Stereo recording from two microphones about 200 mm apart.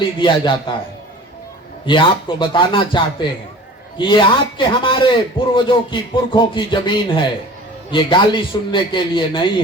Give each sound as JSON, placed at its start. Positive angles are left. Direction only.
{"t": 0.2, "sound": "speech", "side_deg": 25}
{"t": 1.9, "sound": "speech", "side_deg": 25}